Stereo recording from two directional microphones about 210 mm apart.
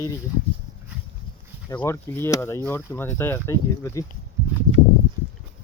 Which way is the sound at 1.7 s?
10° left (ahead or behind).